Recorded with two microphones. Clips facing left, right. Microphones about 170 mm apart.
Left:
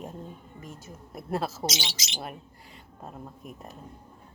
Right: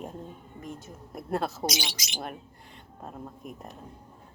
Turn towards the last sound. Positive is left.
turn(degrees=0)  # may be behind; listen again after turning